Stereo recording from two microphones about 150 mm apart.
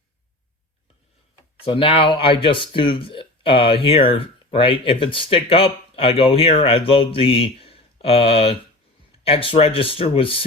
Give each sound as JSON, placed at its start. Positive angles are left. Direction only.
{"t": 1.6, "sound": "speech", "side_deg": 35}